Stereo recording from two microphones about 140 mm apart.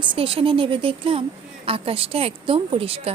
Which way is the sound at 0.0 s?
35° right (ahead or behind).